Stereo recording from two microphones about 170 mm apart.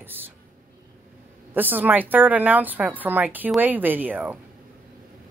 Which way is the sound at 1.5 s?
10° right (ahead or behind).